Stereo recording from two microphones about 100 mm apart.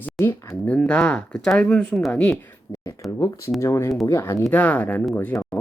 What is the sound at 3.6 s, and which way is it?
Speech, 25° left (ahead or behind).